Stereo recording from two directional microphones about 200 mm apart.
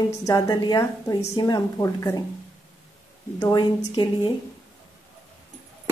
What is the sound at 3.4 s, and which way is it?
Speech, 20° left (ahead or behind).